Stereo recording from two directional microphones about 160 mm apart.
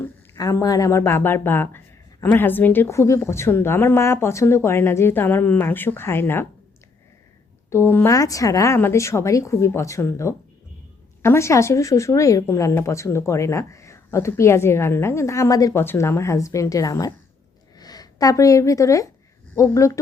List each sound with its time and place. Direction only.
0.0 s speech: 20° left (ahead or behind)
7.7 s speech: 15° left (ahead or behind)